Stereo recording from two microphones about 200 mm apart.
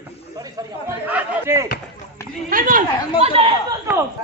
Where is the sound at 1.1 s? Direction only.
10° right (ahead or behind).